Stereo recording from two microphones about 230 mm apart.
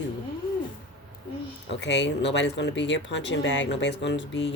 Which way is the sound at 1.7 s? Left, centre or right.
Left.